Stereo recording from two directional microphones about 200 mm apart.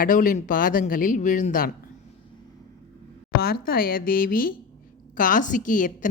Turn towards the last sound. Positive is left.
turn(degrees=40)  # may be behind; listen again after turning